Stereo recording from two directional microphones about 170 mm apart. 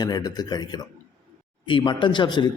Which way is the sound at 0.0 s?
25° left (ahead or behind).